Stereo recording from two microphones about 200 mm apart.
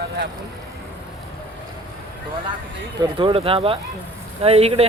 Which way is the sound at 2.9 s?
25° right (ahead or behind).